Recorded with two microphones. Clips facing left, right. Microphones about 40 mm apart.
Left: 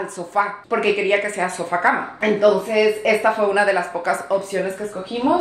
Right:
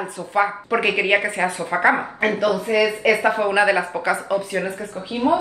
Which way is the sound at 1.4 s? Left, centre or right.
Left.